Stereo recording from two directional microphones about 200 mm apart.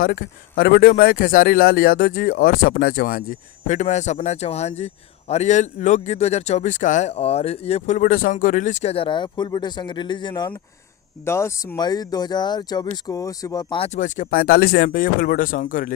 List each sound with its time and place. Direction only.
0.0 s a man's voice: 45° left (ahead or behind)